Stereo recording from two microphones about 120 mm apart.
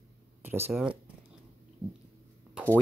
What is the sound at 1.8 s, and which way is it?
Dog, 20° right (ahead or behind).